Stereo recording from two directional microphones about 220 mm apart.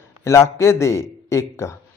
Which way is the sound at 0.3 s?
10° left (ahead or behind).